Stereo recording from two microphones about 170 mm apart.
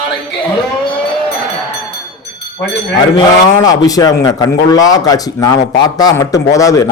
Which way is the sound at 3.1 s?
20° left (ahead or behind).